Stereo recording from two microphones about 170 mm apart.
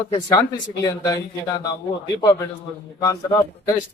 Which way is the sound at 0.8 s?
20° left (ahead or behind).